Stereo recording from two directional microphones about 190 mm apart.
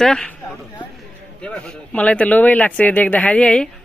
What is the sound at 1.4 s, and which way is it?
Speech, 5° left (ahead or behind).